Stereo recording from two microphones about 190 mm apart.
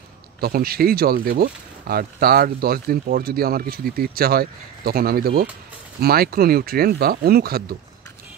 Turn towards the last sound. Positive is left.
turn(degrees=-55)  # may be behind; listen again after turning